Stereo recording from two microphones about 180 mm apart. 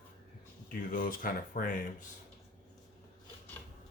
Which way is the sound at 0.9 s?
50° left (ahead or behind).